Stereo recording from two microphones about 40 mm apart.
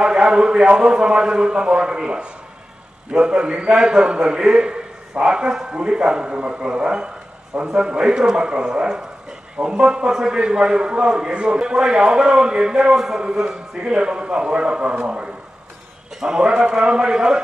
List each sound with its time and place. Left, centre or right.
0.0 s a man's voice: right